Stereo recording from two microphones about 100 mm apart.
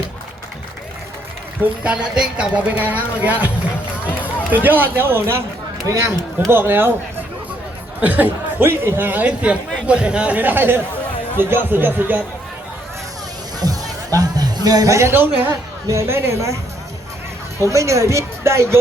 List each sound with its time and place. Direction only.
1.6 s speech: 10° right (ahead or behind)
8.0 s speech: 15° right (ahead or behind)
13.6 s speech: 40° right (ahead or behind)
17.6 s speech: 30° right (ahead or behind)